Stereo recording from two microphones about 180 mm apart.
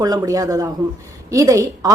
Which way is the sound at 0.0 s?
20° right (ahead or behind).